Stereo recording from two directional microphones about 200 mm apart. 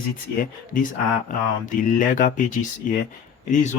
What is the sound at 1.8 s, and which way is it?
Speech, 40° left (ahead or behind).